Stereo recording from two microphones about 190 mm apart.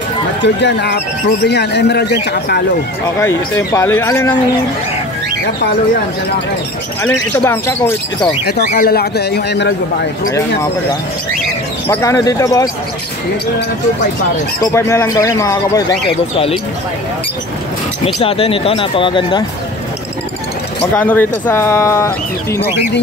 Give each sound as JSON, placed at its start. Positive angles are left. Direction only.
{"t": 0.4, "sound": "speech", "side_deg": 65}
{"t": 3.2, "sound": "speech", "side_deg": 15}
{"t": 7.0, "sound": "speech", "side_deg": 10}
{"t": 8.6, "sound": "speech", "side_deg": 55}
{"t": 11.9, "sound": "speech", "side_deg": 15}
{"t": 14.6, "sound": "speech", "side_deg": 15}
{"t": 18.0, "sound": "speech", "side_deg": 30}
{"t": 20.8, "sound": "speech", "side_deg": 10}